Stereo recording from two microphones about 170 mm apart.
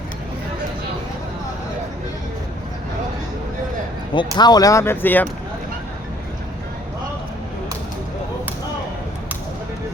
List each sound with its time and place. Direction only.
4.1 s speech: 25° left (ahead or behind)